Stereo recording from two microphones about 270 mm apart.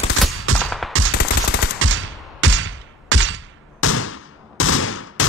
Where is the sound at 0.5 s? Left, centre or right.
Right.